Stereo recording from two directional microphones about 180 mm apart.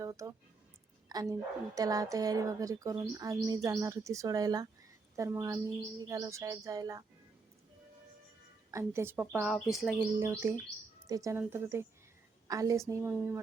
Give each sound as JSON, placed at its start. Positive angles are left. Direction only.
{"t": 0.0, "sound": "a woman's voice", "side_deg": -15}
{"t": 8.7, "sound": "speech", "side_deg": -15}
{"t": 9.5, "sound": "bird", "side_deg": 0}
{"t": 10.2, "sound": "speech", "side_deg": -15}